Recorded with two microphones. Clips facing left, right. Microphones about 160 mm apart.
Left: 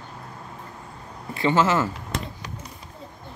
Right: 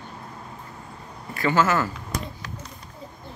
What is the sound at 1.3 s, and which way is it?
Speech, 25° left (ahead or behind).